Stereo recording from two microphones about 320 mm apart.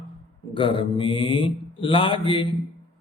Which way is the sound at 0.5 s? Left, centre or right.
Centre.